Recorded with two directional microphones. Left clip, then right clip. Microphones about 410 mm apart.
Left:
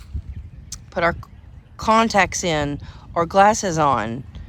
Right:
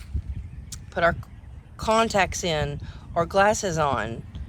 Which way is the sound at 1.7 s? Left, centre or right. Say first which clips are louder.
Left 5 dB; centre.